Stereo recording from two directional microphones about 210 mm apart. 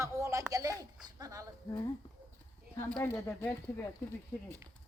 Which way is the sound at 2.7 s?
10° left (ahead or behind).